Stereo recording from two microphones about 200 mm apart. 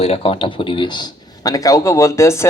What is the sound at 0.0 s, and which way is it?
A man's voice, 30° left (ahead or behind).